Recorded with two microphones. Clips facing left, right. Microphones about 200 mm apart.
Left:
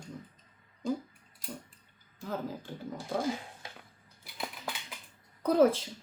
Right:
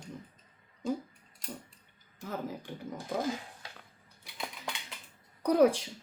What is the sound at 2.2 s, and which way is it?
Speech, 20° right (ahead or behind).